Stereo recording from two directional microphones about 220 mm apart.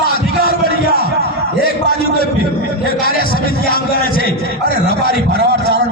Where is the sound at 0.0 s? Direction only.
40° left (ahead or behind).